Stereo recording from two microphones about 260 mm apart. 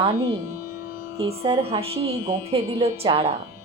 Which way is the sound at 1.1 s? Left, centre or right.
Right.